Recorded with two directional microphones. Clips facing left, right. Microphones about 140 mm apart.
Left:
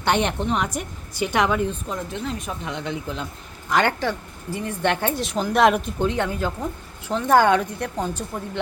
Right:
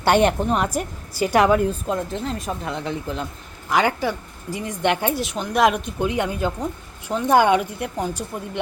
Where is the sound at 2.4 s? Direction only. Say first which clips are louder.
Right 3 dB; 40° right (ahead or behind).